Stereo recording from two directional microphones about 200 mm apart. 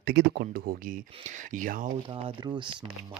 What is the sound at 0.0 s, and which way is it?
Speech, 55° right (ahead or behind).